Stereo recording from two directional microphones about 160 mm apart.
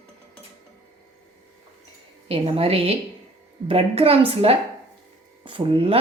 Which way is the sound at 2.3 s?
35° right (ahead or behind).